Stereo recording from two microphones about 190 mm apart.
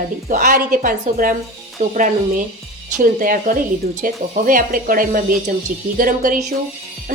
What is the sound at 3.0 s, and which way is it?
A woman's voice, 45° right (ahead or behind).